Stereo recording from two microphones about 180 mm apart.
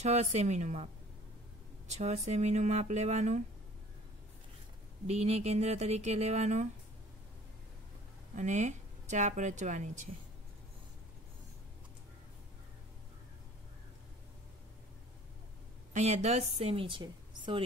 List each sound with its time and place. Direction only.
0.0 s speech: 40° right (ahead or behind)
1.9 s speech: 40° right (ahead or behind)
5.0 s speech: 35° right (ahead or behind)
8.4 s speech: 40° right (ahead or behind)
15.9 s a woman's voice: 40° right (ahead or behind)